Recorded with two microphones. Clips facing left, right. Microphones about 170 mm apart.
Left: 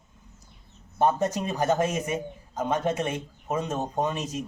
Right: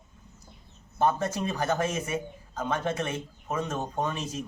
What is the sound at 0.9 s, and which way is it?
A man's voice, 15° left (ahead or behind).